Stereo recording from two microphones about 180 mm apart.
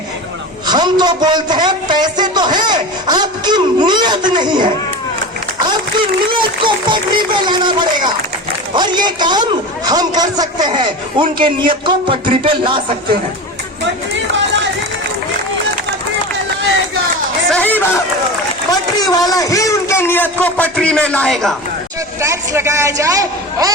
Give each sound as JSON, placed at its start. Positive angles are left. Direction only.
{"t": 0.7, "sound": "a man's voice", "side_deg": -25}
{"t": 6.2, "sound": "a man's voice", "side_deg": -25}
{"t": 14.1, "sound": "run", "side_deg": -90}
{"t": 17.5, "sound": "a sound", "side_deg": 10}
{"t": 18.7, "sound": "a man's voice", "side_deg": 20}
{"t": 22.2, "sound": "a man's voice", "side_deg": -15}